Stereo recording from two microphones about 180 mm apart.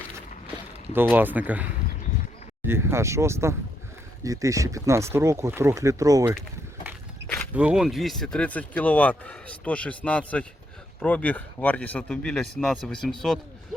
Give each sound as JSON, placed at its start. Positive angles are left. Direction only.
{"t": 1.1, "sound": "speech", "side_deg": -10}
{"t": 7.5, "sound": "speech", "side_deg": -5}